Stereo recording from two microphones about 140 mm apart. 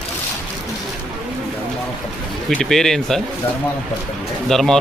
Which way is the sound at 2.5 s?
5° left (ahead or behind).